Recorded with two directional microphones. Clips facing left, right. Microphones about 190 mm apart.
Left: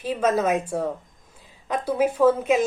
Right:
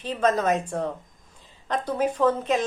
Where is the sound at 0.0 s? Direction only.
10° left (ahead or behind).